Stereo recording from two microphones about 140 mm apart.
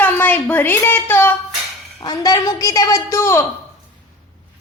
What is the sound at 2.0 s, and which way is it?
A woman's voice, 25° left (ahead or behind).